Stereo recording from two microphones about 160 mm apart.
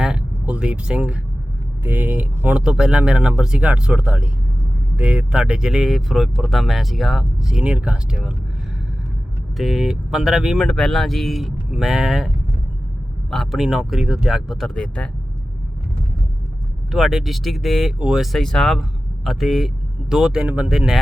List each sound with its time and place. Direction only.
0.0 s speech: 5° right (ahead or behind)
9.6 s speech: centre (ahead or behind)
13.3 s speech: centre (ahead or behind)
16.9 s speech: centre (ahead or behind)